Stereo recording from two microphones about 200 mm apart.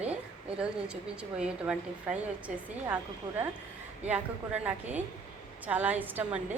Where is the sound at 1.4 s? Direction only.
5° right (ahead or behind).